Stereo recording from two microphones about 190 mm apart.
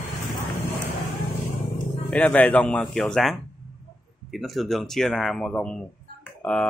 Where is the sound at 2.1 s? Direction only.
10° left (ahead or behind).